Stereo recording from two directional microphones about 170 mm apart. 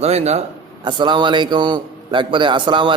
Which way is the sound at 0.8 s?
25° right (ahead or behind).